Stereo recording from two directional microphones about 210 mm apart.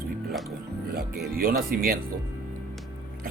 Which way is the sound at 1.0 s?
50° right (ahead or behind).